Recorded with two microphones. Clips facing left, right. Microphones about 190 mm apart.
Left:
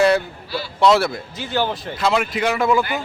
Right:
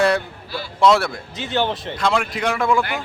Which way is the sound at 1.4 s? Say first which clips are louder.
Right 1 dB; 20° right (ahead or behind).